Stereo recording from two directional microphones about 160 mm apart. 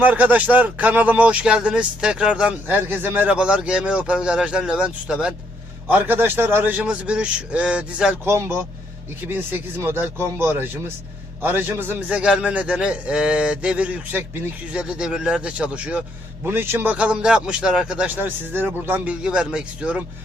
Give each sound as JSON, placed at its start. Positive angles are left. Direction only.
{"t": 0.0, "sound": "speech", "side_deg": -10}